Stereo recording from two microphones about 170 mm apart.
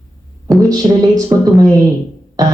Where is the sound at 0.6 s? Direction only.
20° right (ahead or behind).